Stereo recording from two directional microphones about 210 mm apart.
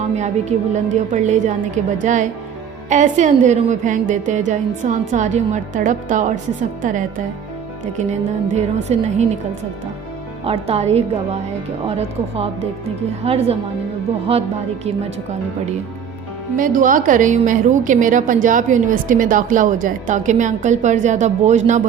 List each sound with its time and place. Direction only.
0.2 s a woman's voice: 35° right (ahead or behind)
8.5 s a woman's voice: 30° right (ahead or behind)
10.4 s a woman's voice: 30° right (ahead or behind)
16.6 s a woman's voice: 40° right (ahead or behind)